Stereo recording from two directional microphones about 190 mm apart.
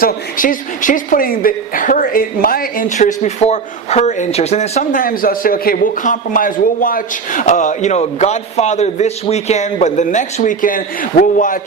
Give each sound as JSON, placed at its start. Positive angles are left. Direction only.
{"t": 0.0, "sound": "speech", "side_deg": 45}